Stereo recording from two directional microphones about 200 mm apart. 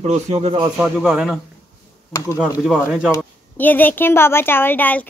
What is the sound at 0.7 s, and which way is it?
Speech, 5° right (ahead or behind).